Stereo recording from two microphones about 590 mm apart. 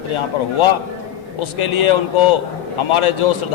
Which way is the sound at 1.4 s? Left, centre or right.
Left.